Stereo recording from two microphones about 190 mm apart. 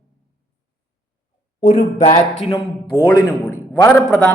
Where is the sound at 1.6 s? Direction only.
35° left (ahead or behind).